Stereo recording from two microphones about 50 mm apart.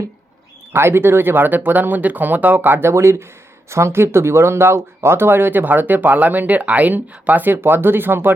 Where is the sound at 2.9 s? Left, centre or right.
Right.